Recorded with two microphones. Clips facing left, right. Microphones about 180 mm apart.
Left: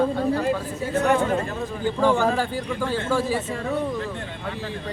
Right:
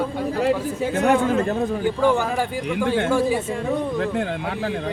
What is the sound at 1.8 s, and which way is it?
A man's voice, 15° right (ahead or behind).